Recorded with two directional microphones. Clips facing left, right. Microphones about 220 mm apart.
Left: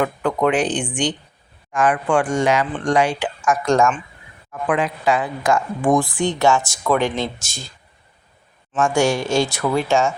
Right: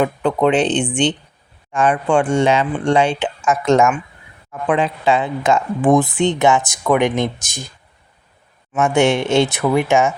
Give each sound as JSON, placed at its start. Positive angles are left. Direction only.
{"t": 0.0, "sound": "speech", "side_deg": -25}
{"t": 8.8, "sound": "speech", "side_deg": -20}